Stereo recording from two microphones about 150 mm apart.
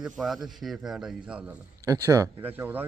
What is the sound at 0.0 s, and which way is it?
A man's voice, centre (ahead or behind).